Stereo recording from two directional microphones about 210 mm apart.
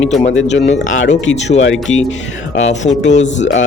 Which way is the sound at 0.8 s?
70° left (ahead or behind).